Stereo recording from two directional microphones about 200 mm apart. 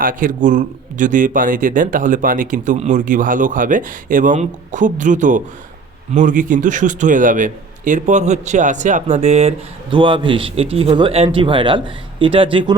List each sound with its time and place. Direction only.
0.0 s a man's voice: 45° right (ahead or behind); by 12.7 s 25° right (ahead or behind)